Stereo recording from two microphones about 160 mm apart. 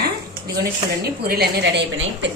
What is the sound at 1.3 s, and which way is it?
Speech, 85° right.